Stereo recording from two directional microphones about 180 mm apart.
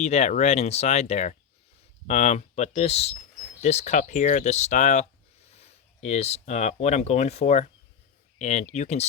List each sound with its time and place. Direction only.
0.0 s speech: 35° left (ahead or behind)